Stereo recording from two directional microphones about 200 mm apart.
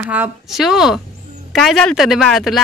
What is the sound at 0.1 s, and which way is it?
A woman's voice, 5° right (ahead or behind).